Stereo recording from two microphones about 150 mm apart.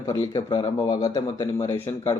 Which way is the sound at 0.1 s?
25° left (ahead or behind).